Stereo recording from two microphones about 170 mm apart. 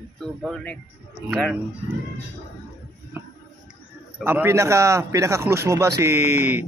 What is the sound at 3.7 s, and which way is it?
Speech, 10° right (ahead or behind).